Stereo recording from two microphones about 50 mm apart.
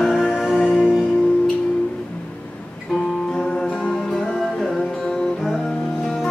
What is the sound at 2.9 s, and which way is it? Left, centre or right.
Music, centre.